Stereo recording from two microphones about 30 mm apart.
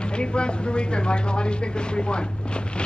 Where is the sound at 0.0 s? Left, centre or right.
Left.